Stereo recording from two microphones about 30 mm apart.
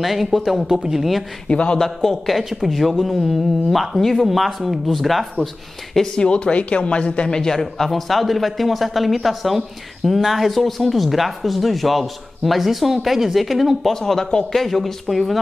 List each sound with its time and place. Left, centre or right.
0.0 s speech: centre
1.5 s speech: left
1.8 s a man's voice: centre
6.1 s speech: left
7.2 s a man's voice: left
7.6 s speech: centre
13.9 s a man's voice: centre